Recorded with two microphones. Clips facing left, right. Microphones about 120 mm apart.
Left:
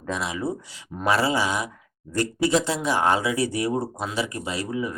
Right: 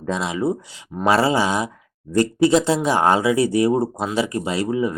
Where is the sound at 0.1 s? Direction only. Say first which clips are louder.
Right 6 dB; 25° right (ahead or behind).